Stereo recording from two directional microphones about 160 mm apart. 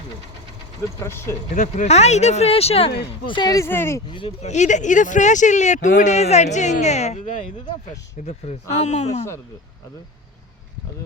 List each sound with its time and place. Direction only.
0.9 s speech: 15° left (ahead or behind)
1.5 s speech: 50° left (ahead or behind)
3.2 s speech: 25° left (ahead or behind)
4.4 s speech: 50° left (ahead or behind)
8.7 s speech: 45° left (ahead or behind)